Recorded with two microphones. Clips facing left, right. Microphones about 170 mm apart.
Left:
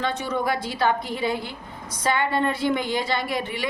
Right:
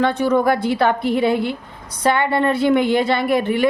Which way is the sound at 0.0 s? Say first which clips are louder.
Right 9 dB; 55° right (ahead or behind).